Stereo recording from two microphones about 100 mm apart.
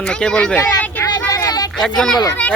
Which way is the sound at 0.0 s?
10° left (ahead or behind).